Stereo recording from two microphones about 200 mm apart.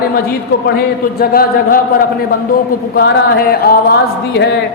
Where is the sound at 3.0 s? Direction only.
50° left (ahead or behind).